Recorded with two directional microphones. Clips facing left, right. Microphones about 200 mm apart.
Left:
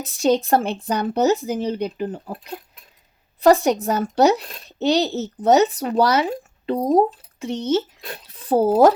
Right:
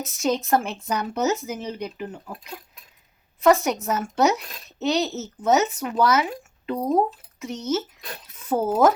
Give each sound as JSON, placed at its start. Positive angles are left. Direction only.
{"t": 0.0, "sound": "speech", "side_deg": 30}